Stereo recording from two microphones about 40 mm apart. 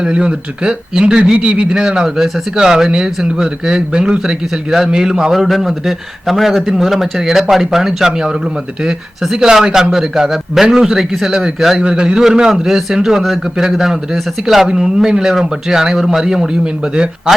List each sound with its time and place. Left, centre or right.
0.0 s a man's voice: right
5.3 s a man's voice: centre
11.8 s a man's voice: right